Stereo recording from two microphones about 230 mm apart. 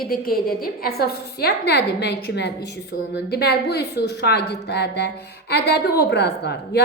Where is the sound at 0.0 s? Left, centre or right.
Left.